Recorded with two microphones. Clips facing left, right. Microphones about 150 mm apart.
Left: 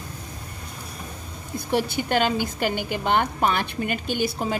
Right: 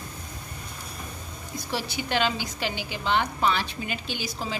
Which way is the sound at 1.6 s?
55° left (ahead or behind).